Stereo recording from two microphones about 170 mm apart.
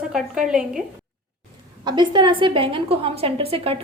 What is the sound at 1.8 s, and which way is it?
A woman's voice, 25° right (ahead or behind).